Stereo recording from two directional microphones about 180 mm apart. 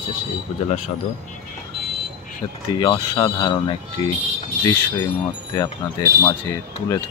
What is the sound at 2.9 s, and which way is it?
Speech, 25° left (ahead or behind).